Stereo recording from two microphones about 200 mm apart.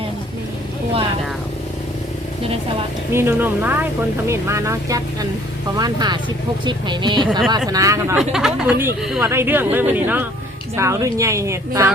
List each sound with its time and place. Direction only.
3.1 s speech: 10° right (ahead or behind)
8.2 s speech: centre (ahead or behind)